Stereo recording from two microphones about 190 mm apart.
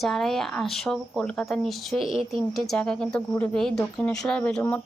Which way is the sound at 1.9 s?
30° right (ahead or behind).